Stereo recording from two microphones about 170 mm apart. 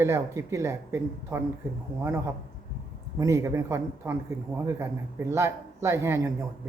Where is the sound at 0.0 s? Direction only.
15° right (ahead or behind).